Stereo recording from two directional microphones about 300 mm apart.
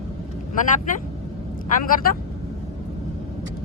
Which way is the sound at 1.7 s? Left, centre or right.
Left.